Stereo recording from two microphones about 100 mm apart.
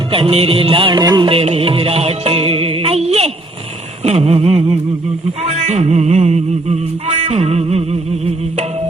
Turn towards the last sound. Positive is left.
turn(degrees=-90)